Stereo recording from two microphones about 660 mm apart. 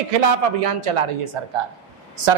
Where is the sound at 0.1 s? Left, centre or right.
Right.